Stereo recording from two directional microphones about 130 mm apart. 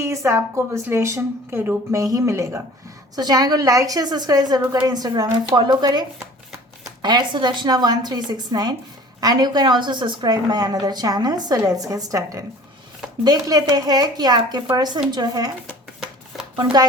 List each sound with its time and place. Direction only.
0.0 s a woman's voice: 20° right (ahead or behind)